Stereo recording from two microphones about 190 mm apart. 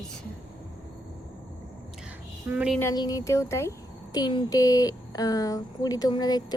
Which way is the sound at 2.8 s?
20° left (ahead or behind).